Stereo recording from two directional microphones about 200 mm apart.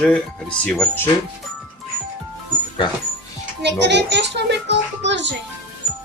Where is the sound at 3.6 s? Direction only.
60° right (ahead or behind).